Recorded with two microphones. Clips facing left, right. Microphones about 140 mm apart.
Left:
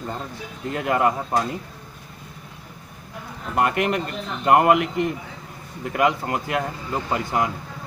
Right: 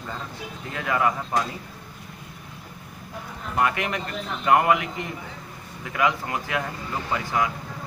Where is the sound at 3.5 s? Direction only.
50° left (ahead or behind).